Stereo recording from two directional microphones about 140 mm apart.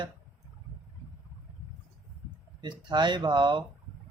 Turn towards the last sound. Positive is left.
turn(degrees=-35)  # may be behind; listen again after turning